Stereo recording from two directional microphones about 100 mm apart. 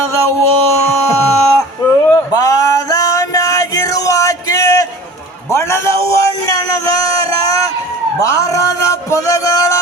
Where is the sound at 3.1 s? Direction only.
35° left (ahead or behind).